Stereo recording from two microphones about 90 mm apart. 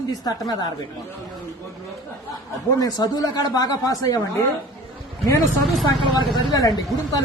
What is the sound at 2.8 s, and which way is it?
A man's voice, 45° left (ahead or behind).